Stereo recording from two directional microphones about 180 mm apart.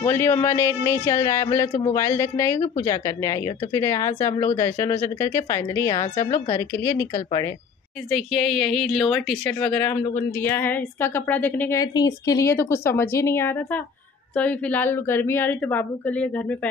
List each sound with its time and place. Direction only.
0.0 s speech: 15° left (ahead or behind)
8.1 s a woman's voice: centre (ahead or behind)
11.8 s speech: 20° left (ahead or behind)